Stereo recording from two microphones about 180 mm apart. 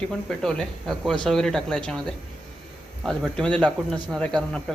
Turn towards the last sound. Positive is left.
turn(degrees=5)  # may be behind; listen again after turning